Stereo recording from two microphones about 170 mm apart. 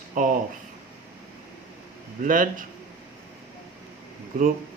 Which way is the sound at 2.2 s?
50° right (ahead or behind).